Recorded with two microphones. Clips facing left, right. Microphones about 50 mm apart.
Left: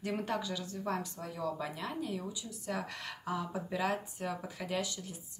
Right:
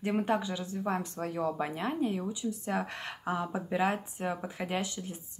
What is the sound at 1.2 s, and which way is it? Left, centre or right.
Speech, right.